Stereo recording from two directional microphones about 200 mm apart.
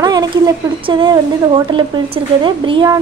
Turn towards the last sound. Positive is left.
turn(degrees=-20)  # may be behind; listen again after turning